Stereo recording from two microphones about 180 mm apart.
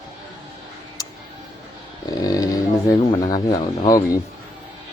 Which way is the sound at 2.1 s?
20° left (ahead or behind).